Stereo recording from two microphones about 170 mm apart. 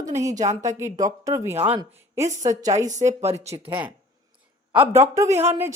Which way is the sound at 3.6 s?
15° right (ahead or behind).